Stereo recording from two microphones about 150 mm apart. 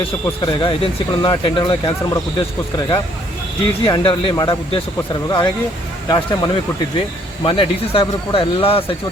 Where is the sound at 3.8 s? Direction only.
30° left (ahead or behind).